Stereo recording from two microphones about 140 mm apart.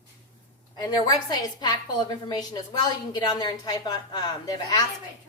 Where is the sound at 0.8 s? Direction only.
30° left (ahead or behind).